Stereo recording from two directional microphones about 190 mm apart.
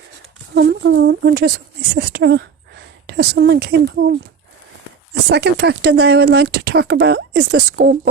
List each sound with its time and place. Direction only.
0.5 s speech: 60° right (ahead or behind)
5.3 s speech: 60° right (ahead or behind)